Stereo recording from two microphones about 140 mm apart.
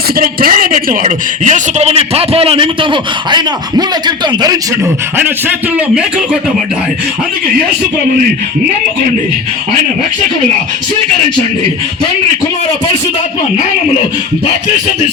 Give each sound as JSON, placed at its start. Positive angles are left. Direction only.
{"t": 0.2, "sound": "a man's voice", "side_deg": -90}
{"t": 5.1, "sound": "speech", "side_deg": -15}